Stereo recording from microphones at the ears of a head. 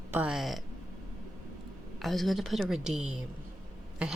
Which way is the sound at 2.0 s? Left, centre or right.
Centre.